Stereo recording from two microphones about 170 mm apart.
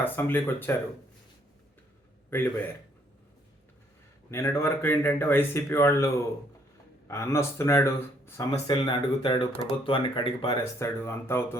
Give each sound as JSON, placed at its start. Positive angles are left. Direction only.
{"t": 0.0, "sound": "a man's voice", "side_deg": 10}
{"t": 4.3, "sound": "a man's voice", "side_deg": 15}
{"t": 8.4, "sound": "speech", "side_deg": 30}
{"t": 10.6, "sound": "a man's voice", "side_deg": 15}